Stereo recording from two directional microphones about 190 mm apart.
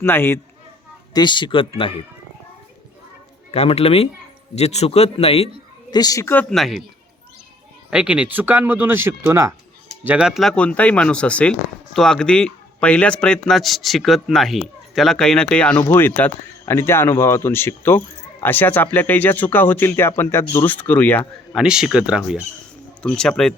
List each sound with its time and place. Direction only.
0.0 s speech: 10° left (ahead or behind)
1.1 s a man's voice: 25° left (ahead or behind)
3.5 s a man's voice: 35° left (ahead or behind)
5.9 s speech: 20° left (ahead or behind)
6.5 s speech: centre (ahead or behind)
7.9 s speech: 5° right (ahead or behind)
21.5 s speech: 5° right (ahead or behind)